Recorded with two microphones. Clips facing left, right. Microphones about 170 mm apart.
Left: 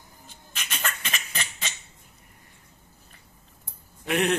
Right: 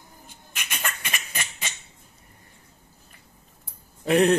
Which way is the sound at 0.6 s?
10° right (ahead or behind).